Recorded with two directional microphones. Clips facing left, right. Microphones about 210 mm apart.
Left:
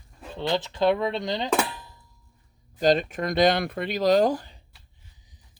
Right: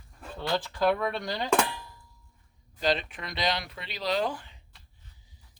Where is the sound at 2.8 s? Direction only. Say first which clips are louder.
Left 7 dB; 45° left (ahead or behind).